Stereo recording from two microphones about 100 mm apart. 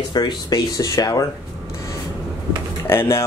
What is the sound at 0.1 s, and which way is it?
Speech, 40° left (ahead or behind).